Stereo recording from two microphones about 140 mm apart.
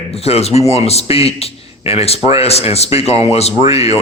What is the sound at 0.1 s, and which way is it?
Speech, 45° left (ahead or behind).